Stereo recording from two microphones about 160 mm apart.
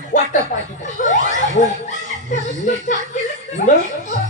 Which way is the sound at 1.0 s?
50° left (ahead or behind).